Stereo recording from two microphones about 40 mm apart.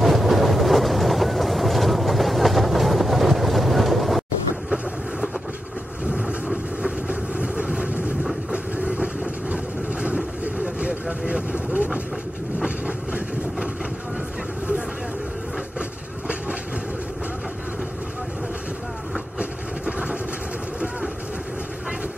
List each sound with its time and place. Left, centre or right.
0.0 s train: centre
6.1 s vehicle: right
12.5 s train: right